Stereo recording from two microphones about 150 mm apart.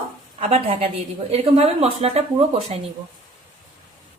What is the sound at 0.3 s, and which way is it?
Speech, 45° right (ahead or behind).